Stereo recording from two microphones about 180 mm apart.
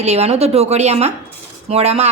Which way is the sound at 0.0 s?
35° right (ahead or behind).